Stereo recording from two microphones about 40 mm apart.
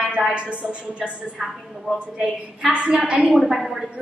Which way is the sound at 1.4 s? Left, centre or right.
Centre.